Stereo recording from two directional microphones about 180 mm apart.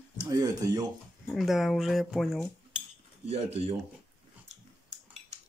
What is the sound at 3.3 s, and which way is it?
Speech, 35° right (ahead or behind).